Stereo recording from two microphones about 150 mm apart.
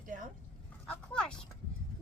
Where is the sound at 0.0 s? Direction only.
60° right (ahead or behind).